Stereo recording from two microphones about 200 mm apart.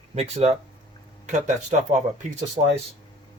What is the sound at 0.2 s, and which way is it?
Speech, 30° right (ahead or behind).